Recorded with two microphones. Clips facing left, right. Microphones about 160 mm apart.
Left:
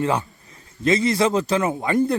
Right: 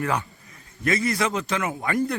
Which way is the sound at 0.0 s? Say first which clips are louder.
Left 4 dB; 25° left (ahead or behind).